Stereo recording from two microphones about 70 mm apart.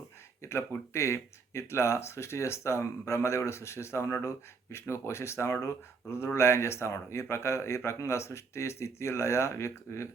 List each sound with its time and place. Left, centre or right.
0.4 s speech: left